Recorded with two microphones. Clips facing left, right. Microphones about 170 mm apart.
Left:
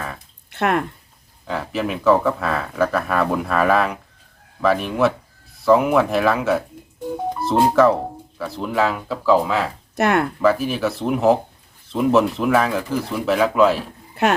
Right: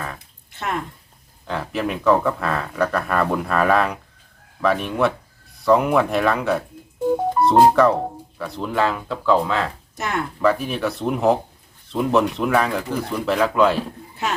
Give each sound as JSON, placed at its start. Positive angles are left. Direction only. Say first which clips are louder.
{"t": 0.5, "sound": "speech", "louder": "left 7 dB", "side_deg": 65}
{"t": 1.5, "sound": "speech", "louder": "left 1 dB", "side_deg": 0}
{"t": 7.4, "sound": "music", "louder": "right 9 dB", "side_deg": -50}
{"t": 7.8, "sound": "speech", "louder": "left 1 dB", "side_deg": 0}
{"t": 9.9, "sound": "speech", "louder": "left 10 dB", "side_deg": 65}
{"t": 10.4, "sound": "speech", "louder": "right 2 dB", "side_deg": 0}
{"t": 14.2, "sound": "speech", "louder": "left 8 dB", "side_deg": 60}